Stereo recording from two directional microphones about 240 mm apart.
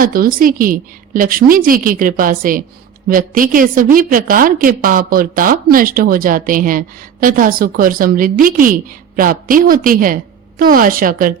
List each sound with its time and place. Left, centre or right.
0.0 s a woman's voice: right